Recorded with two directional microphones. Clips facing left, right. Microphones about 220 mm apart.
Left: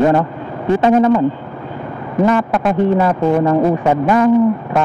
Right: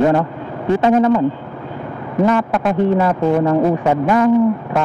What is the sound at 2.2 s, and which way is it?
Speech, 20° left (ahead or behind).